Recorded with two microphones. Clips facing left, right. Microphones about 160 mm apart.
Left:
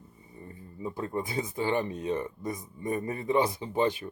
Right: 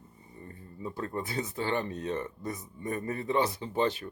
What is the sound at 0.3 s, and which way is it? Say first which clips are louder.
Speech: left 2 dB; 15° left (ahead or behind).